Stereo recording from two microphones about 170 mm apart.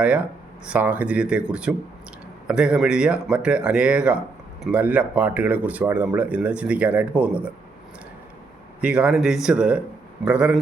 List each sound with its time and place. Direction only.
0.0 s speech: 5° right (ahead or behind)
8.8 s speech: 5° right (ahead or behind)